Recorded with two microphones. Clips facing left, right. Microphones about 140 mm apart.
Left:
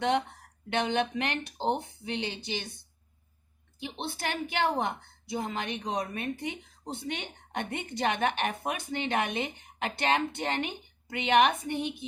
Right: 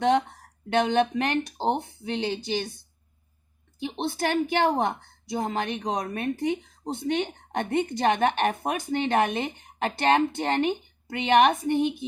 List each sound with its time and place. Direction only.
0.0 s speech: 45° right (ahead or behind)
3.8 s a woman's voice: 40° right (ahead or behind)